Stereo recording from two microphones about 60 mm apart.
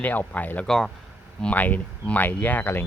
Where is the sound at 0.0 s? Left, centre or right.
Left.